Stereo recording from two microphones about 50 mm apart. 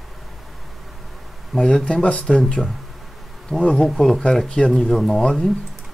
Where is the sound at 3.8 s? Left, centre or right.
Centre.